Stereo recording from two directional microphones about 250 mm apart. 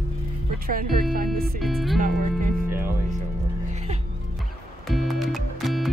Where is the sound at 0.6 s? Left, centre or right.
Right.